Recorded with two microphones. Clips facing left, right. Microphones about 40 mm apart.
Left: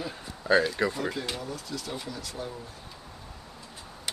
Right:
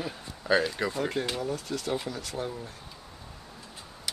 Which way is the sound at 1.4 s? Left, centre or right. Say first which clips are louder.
Right 4 dB; right.